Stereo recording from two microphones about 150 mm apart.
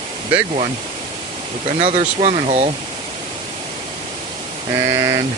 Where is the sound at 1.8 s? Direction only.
40° right (ahead or behind).